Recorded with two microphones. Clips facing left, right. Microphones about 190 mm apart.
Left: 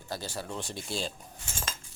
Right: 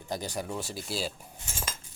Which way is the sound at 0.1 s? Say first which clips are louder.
Right 3 dB; 15° right (ahead or behind).